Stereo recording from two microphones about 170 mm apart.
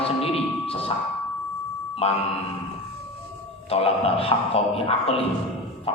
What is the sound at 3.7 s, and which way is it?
Speech, 35° left (ahead or behind).